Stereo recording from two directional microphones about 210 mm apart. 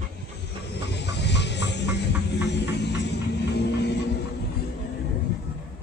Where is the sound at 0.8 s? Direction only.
55° left (ahead or behind).